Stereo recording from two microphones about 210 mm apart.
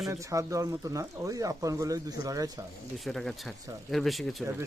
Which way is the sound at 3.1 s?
Centre (ahead or behind).